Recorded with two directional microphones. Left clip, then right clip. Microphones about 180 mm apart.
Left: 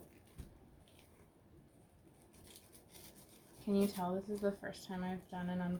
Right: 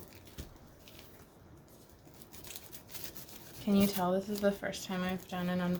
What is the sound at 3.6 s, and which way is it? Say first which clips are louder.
Speech: right 6 dB; 35° right (ahead or behind).